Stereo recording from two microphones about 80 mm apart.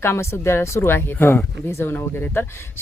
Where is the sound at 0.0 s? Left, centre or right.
Left.